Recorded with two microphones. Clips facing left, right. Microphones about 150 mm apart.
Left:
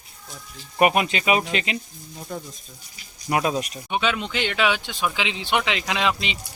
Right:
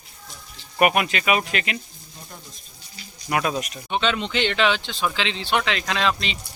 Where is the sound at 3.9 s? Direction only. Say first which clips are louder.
Right 1 dB; 5° left (ahead or behind).